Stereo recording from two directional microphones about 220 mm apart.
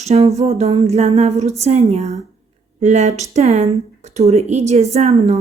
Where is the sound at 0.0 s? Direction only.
30° right (ahead or behind).